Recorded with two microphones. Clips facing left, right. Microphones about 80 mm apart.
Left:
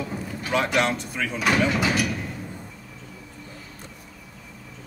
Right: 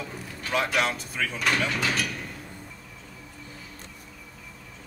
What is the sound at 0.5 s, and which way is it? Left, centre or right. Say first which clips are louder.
Speech: left 3 dB; centre.